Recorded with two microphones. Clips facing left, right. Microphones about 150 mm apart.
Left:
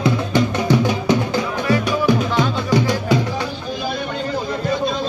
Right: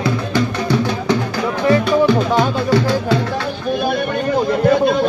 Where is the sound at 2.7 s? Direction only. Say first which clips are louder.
Right 1 dB; 15° left (ahead or behind).